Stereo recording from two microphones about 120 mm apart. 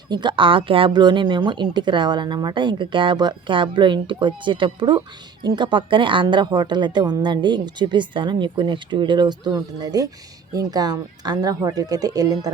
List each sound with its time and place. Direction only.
0.1 s speech: 40° right (ahead or behind)